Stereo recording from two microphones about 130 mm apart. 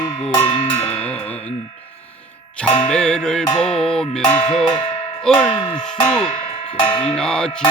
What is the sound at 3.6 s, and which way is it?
Tubular bells, 5° left (ahead or behind).